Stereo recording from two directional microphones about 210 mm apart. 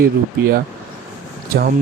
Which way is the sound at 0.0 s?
50° right (ahead or behind).